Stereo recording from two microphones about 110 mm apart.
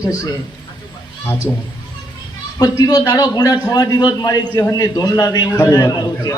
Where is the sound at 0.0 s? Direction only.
35° left (ahead or behind).